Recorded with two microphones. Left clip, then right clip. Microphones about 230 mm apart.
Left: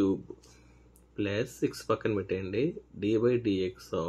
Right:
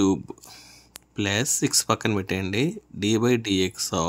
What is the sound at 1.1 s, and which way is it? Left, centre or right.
Speech, right.